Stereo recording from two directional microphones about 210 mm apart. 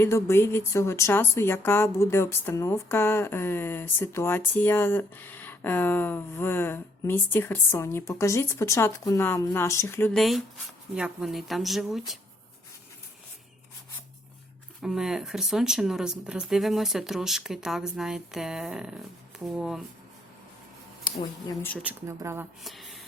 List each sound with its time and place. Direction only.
0.0 s speech: 10° left (ahead or behind)
14.8 s speech: centre (ahead or behind)
21.0 s speech: 15° left (ahead or behind)
21.8 s speech: 10° right (ahead or behind)
22.6 s a sound: centre (ahead or behind)